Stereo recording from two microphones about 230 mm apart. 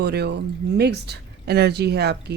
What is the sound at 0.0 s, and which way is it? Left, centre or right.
Speech, right.